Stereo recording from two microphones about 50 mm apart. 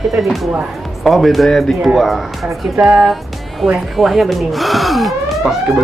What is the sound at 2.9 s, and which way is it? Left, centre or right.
Music, centre.